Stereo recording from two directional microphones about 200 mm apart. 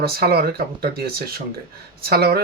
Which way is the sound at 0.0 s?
50° right (ahead or behind).